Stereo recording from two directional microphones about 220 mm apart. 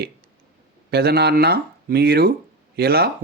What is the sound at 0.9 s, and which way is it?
Speech, 45° right (ahead or behind).